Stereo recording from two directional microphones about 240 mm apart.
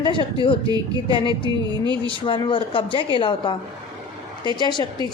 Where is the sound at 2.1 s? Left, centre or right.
Left.